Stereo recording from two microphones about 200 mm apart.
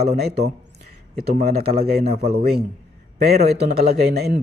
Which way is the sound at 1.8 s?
50° right (ahead or behind).